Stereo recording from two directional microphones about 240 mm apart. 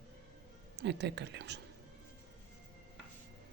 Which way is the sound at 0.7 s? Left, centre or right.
Right.